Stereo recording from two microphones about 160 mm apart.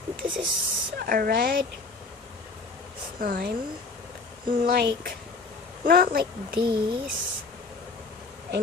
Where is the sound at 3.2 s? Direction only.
65° right (ahead or behind).